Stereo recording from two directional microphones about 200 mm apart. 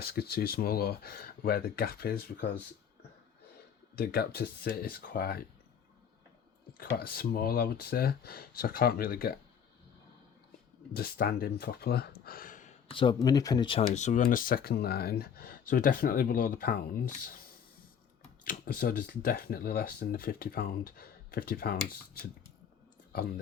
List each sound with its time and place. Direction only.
0.0 s speech: 50° left (ahead or behind)
3.9 s speech: 50° left (ahead or behind)
6.7 s speech: 50° left (ahead or behind)
10.9 s speech: 50° left (ahead or behind)
12.9 s speech: 25° left (ahead or behind); by 16.8 s 50° left (ahead or behind)
18.4 s speech: 45° left (ahead or behind)